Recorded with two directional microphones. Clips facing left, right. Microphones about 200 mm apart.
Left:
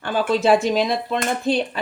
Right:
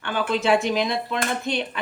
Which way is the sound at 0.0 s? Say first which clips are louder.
Left 4 dB; 35° left (ahead or behind).